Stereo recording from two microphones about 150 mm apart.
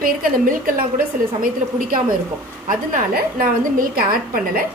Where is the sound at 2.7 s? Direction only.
75° right (ahead or behind).